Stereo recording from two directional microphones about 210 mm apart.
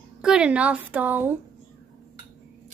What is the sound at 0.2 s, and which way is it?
A child's voice, 5° right (ahead or behind).